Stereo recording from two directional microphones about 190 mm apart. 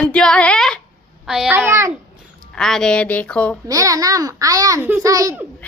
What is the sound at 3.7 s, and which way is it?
A child's voice, 20° right (ahead or behind).